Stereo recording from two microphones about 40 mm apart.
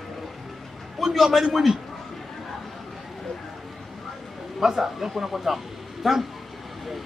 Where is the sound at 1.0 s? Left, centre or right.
Centre.